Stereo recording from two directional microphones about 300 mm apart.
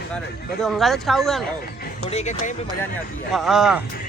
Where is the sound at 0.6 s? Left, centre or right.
Centre.